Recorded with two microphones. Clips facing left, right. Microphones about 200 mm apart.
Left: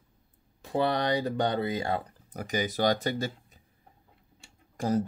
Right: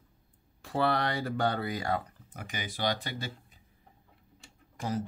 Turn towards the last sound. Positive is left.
turn(degrees=40)  # may be behind; listen again after turning